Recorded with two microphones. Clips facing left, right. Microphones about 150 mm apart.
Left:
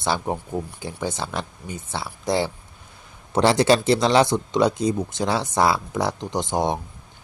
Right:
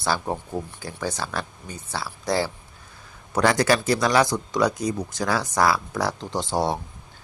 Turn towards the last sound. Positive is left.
turn(degrees=20)  # may be behind; listen again after turning